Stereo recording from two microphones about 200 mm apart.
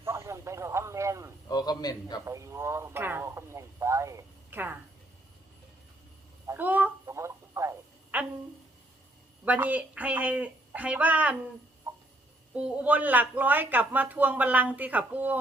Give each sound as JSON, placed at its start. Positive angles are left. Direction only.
{"t": 0.0, "sound": "radio", "side_deg": -15}
{"t": 1.5, "sound": "a man's voice", "side_deg": 20}
{"t": 2.2, "sound": "a sound", "side_deg": -15}
{"t": 6.5, "sound": "telephone", "side_deg": -10}
{"t": 9.4, "sound": "speech", "side_deg": -10}
{"t": 11.9, "sound": "a sound", "side_deg": -15}
{"t": 12.5, "sound": "speech", "side_deg": -5}